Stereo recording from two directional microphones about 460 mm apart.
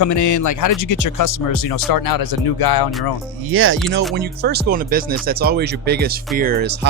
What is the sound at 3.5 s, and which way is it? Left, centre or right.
Speech, right.